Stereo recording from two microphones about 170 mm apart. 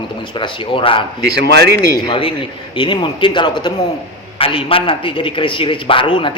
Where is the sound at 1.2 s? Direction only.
70° right (ahead or behind).